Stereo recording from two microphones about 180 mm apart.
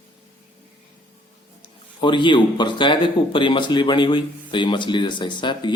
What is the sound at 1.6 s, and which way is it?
Speech, 25° left (ahead or behind).